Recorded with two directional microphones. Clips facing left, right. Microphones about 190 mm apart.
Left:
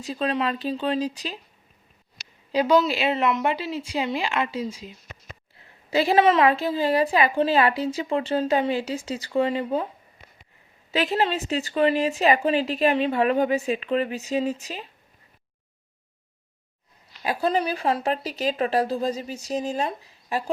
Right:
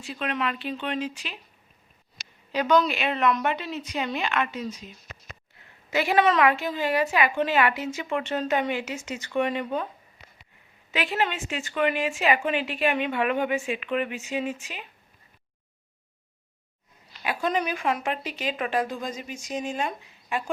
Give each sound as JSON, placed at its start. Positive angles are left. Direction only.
{"t": 0.0, "sound": "a woman's voice", "side_deg": 35}
{"t": 2.8, "sound": "speech", "side_deg": 30}
{"t": 5.9, "sound": "a woman's voice", "side_deg": 30}
{"t": 10.9, "sound": "a woman's voice", "side_deg": 40}
{"t": 17.2, "sound": "a woman's voice", "side_deg": 35}